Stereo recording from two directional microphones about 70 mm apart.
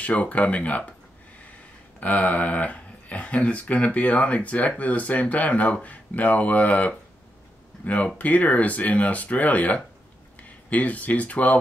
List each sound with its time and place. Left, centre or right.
0.0 s speech: left
2.0 s speech: left